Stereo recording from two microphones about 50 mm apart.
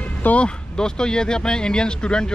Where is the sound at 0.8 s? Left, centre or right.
Centre.